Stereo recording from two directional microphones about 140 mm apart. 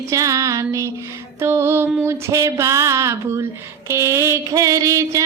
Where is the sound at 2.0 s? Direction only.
20° right (ahead or behind).